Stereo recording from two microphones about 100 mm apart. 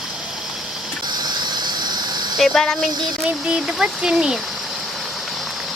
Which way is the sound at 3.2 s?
10° right (ahead or behind).